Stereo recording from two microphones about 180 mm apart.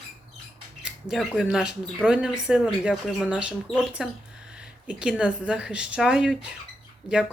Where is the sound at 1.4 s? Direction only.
5° right (ahead or behind).